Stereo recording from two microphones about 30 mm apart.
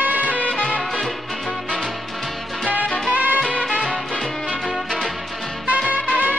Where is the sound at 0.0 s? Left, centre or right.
Right.